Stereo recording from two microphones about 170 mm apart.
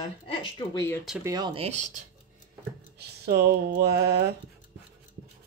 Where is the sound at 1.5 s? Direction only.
40° right (ahead or behind).